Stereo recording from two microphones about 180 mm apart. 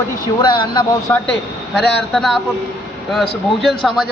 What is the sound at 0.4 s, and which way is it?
Speech, 25° left (ahead or behind).